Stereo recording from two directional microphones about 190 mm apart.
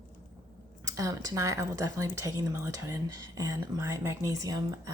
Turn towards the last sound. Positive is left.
turn(degrees=-20)  # may be behind; listen again after turning